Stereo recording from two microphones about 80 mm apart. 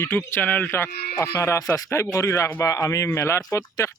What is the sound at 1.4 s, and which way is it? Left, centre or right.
Speech, left.